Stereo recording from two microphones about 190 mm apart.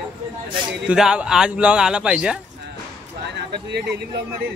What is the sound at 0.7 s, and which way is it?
Speech, 5° right (ahead or behind).